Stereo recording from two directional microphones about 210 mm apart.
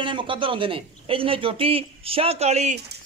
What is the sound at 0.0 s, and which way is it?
A man's voice, 25° right (ahead or behind).